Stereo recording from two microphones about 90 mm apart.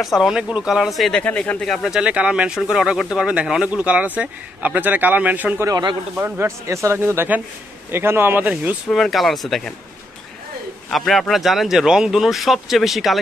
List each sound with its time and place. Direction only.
0.0 s speech: 5° right (ahead or behind)
1.1 s speech: 10° left (ahead or behind)
2.0 s speech: 10° right (ahead or behind)
5.7 s speech: 50° right (ahead or behind)
6.1 s speech: 30° right (ahead or behind)
8.8 s speech: 5° left (ahead or behind)
10.9 s speech: centre (ahead or behind)